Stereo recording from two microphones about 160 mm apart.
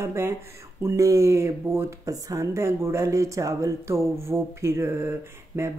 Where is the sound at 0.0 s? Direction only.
15° right (ahead or behind).